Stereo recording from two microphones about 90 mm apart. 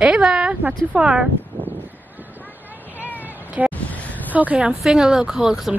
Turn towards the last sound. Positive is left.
turn(degrees=-5)  # may be behind; listen again after turning